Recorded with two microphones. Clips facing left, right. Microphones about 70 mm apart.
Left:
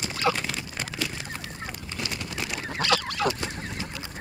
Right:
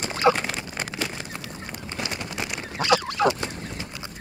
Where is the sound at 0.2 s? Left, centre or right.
Right.